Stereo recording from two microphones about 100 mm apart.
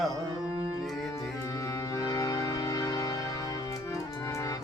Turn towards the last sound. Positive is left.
turn(degrees=30)  # may be behind; listen again after turning